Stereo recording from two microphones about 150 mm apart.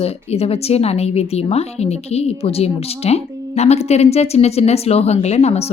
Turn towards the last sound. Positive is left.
turn(degrees=45)  # may be behind; listen again after turning